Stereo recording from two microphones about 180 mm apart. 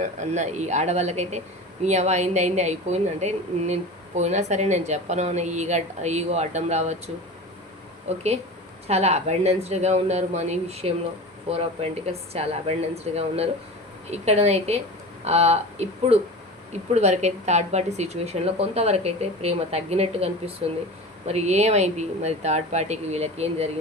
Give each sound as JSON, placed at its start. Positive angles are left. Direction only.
{"t": 0.0, "sound": "speech", "side_deg": -40}
{"t": 8.1, "sound": "speech", "side_deg": -35}